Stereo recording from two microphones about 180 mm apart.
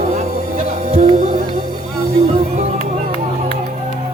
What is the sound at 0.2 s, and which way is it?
Music, 35° right (ahead or behind).